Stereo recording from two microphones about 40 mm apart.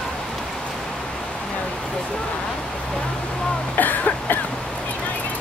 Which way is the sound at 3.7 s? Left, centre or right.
Left.